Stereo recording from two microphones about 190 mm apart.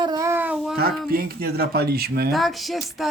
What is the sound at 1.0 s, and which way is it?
Speech, 50° right (ahead or behind).